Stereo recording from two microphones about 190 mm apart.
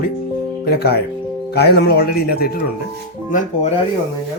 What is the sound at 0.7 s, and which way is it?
Speech, 55° left (ahead or behind).